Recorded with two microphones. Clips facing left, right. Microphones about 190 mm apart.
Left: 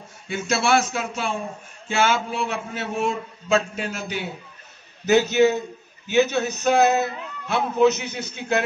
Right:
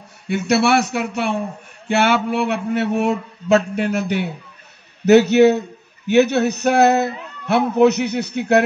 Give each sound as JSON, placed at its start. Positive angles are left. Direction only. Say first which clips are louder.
{"t": 0.3, "sound": "a man's voice", "louder": "right 5 dB", "side_deg": -65}